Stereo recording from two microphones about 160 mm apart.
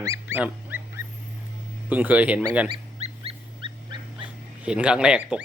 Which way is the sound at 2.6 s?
35° right (ahead or behind).